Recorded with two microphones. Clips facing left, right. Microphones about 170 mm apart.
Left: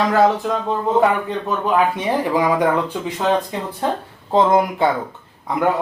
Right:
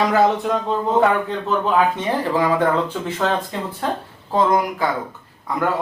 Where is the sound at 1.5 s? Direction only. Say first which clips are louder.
Even; 10° left (ahead or behind).